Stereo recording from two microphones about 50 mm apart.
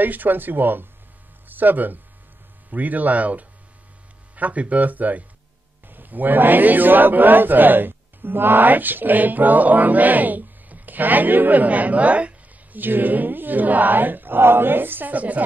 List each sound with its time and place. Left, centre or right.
0.0 s a man's voice: right
12.7 s a man's voice: right